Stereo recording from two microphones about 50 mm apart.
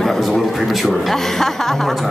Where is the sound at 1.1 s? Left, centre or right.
Centre.